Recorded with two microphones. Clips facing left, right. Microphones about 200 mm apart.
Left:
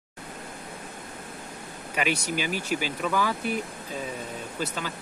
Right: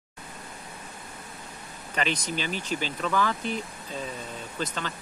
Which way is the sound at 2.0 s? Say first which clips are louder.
Left 2 dB; 10° left (ahead or behind).